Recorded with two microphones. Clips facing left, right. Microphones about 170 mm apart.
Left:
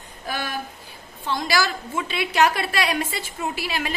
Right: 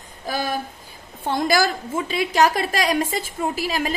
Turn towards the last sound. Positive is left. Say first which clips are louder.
# right 4 dB
turn(degrees=-40)  # may be behind; listen again after turning